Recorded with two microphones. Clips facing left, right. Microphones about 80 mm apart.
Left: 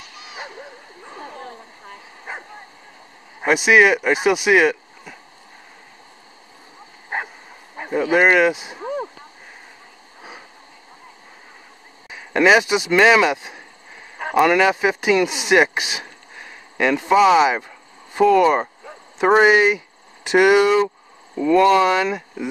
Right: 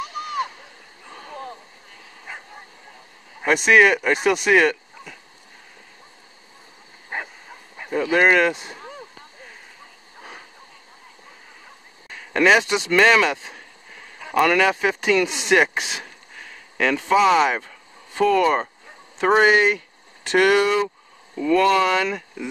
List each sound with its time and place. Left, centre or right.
0.2 s splash: right
2.3 s bow-wow: left
3.4 s speech: centre
7.1 s dog: left
7.9 s speech: centre
12.1 s speech: centre